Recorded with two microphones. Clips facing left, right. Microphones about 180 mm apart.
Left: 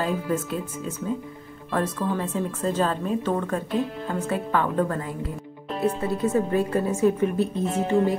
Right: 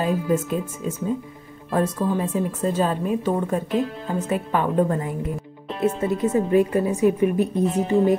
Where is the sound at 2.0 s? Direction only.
15° right (ahead or behind).